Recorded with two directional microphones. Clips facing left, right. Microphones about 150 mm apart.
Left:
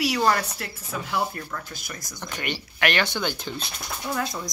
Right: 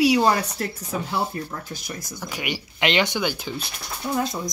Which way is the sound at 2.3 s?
10° right (ahead or behind).